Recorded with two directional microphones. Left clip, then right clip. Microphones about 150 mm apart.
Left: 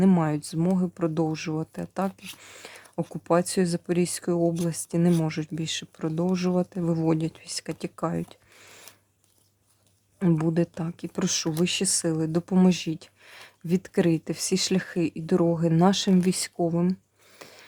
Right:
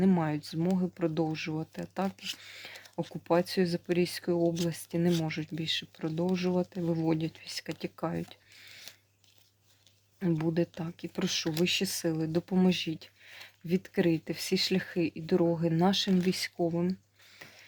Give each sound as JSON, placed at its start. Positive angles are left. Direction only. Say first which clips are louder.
{"t": 0.0, "sound": "speech", "louder": "left 5 dB", "side_deg": 35}
{"t": 2.0, "sound": "speech", "louder": "left 2 dB", "side_deg": 20}
{"t": 2.5, "sound": "speech", "louder": "left 1 dB", "side_deg": 30}
{"t": 3.2, "sound": "speech", "louder": "left 4 dB", "side_deg": 40}
{"t": 4.4, "sound": "speech", "louder": "left 4 dB", "side_deg": 25}
{"t": 10.2, "sound": "speech", "louder": "left 5 dB", "side_deg": 40}
{"t": 17.3, "sound": "a sound", "louder": "left 4 dB", "side_deg": 40}